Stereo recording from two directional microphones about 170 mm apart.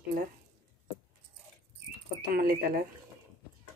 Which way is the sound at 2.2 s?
60° right (ahead or behind).